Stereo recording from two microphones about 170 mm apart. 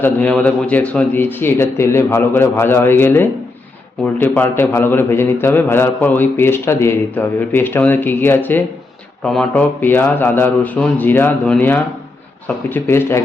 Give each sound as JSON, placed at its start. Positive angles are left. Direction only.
{"t": 0.0, "sound": "a man's voice", "side_deg": 10}